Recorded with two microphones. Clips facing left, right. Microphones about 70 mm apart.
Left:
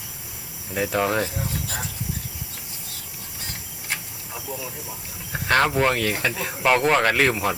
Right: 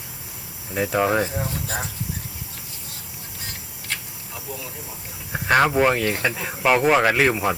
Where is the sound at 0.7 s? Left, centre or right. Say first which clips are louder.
Right 2 dB; centre.